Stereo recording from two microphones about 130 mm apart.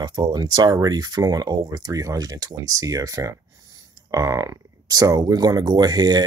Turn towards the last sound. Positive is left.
turn(degrees=-30)  # may be behind; listen again after turning